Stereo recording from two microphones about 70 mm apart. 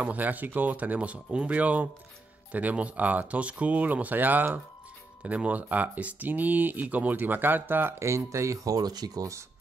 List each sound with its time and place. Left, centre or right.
0.0 s speech: right
8.0 s speech: right